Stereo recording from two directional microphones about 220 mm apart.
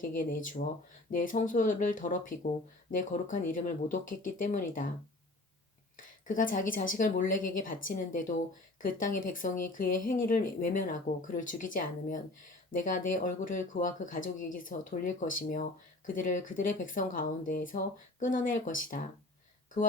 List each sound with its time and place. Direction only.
0.0 s speech: 40° left (ahead or behind)
6.2 s speech: 35° left (ahead or behind)